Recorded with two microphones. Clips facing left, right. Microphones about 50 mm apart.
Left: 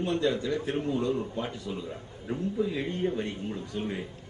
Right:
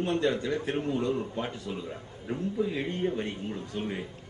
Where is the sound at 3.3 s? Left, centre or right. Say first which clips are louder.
Left 1 dB; centre.